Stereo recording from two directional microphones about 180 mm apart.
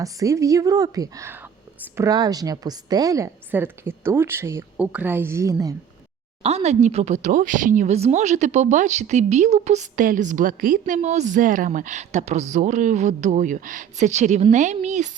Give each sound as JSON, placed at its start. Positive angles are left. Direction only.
{"t": 0.0, "sound": "a woman's voice", "side_deg": -20}
{"t": 6.4, "sound": "speech", "side_deg": -35}